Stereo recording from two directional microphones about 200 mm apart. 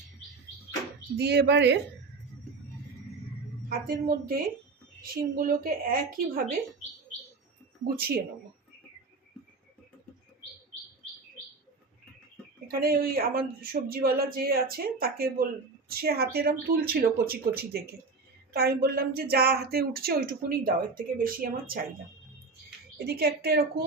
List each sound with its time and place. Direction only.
1.1 s speech: 55° right (ahead or behind)
3.7 s a woman's voice: 45° right (ahead or behind)
7.9 s speech: 50° right (ahead or behind)
12.6 s speech: 50° right (ahead or behind)
23.0 s speech: 50° right (ahead or behind)